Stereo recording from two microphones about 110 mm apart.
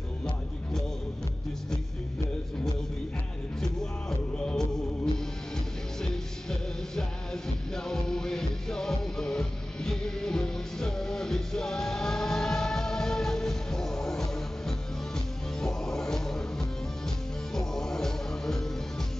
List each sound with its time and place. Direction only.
3.6 s music: 5° left (ahead or behind)
6.5 s music: 5° left (ahead or behind)